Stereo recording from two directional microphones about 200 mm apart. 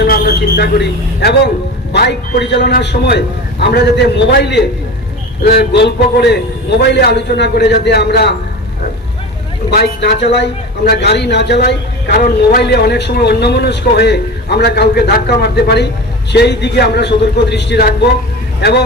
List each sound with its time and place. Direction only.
0.0 s a man's voice: 55° left (ahead or behind)
9.6 s a man's voice: 55° left (ahead or behind)